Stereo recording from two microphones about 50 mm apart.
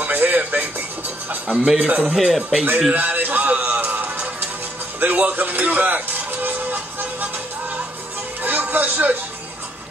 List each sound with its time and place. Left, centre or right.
0.0 s music: right
1.5 s a man's voice: centre
2.1 s speech: centre
2.9 s music: right
8.4 s music: right